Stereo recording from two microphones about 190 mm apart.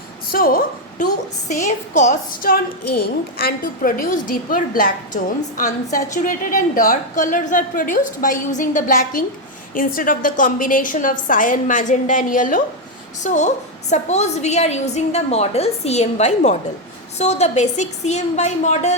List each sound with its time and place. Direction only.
0.3 s a woman's voice: 50° left (ahead or behind)